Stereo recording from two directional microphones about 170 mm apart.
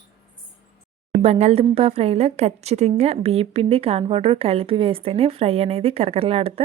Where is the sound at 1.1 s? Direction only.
40° right (ahead or behind).